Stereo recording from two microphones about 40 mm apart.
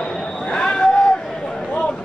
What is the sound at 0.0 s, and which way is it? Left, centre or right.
Basketball bounce, centre.